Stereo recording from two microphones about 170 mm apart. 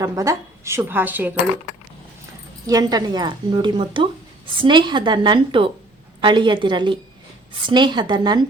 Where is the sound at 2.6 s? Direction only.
20° right (ahead or behind).